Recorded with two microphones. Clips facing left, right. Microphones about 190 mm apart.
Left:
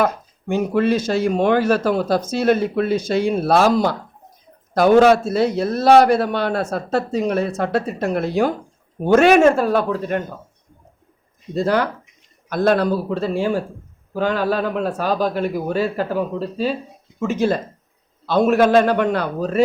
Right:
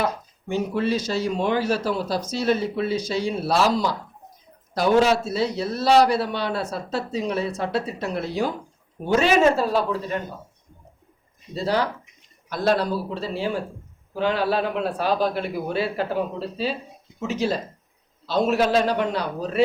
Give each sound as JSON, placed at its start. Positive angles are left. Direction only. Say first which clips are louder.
{"t": 0.0, "sound": "a man's voice", "louder": "left 6 dB", "side_deg": 50}
{"t": 11.5, "sound": "speech", "louder": "left 5 dB", "side_deg": 50}